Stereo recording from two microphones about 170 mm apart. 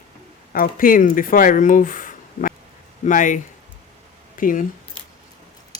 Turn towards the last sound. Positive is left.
turn(degrees=50)  # may be behind; listen again after turning